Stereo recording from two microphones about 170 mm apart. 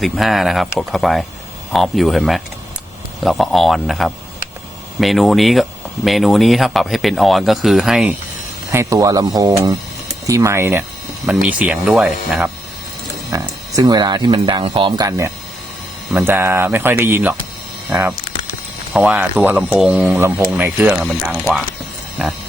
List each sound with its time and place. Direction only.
0.0 s speech: centre (ahead or behind)
8.7 s speech: 20° right (ahead or behind)
13.4 s speech: 25° right (ahead or behind)
18.9 s speech: 5° right (ahead or behind)
20.1 s speech: 15° right (ahead or behind)